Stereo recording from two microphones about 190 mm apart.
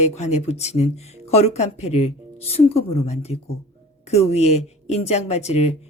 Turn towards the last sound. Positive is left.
turn(degrees=35)  # may be behind; listen again after turning